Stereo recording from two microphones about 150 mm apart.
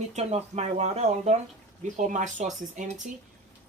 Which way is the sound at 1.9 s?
55° right (ahead or behind).